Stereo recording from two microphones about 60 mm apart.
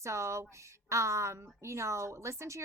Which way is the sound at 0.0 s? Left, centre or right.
Right.